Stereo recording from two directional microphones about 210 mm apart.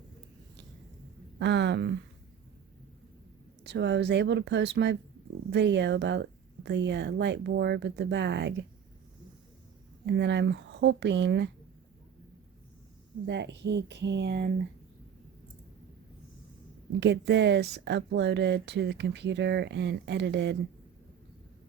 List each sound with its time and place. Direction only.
1.4 s speech: 55° right (ahead or behind)
3.6 s speech: 55° right (ahead or behind)
10.1 s speech: 55° right (ahead or behind)
13.2 s speech: 55° right (ahead or behind)
17.0 s speech: 55° right (ahead or behind)